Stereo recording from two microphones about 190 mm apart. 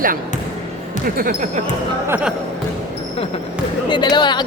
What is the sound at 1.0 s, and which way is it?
Speech, 50° right (ahead or behind).